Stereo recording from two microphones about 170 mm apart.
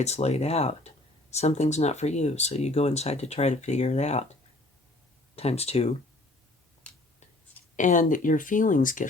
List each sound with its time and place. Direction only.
0.0 s speech: 40° left (ahead or behind)
5.4 s speech: 35° left (ahead or behind)
6.8 s a sound: 5° left (ahead or behind)
7.8 s speech: 50° left (ahead or behind)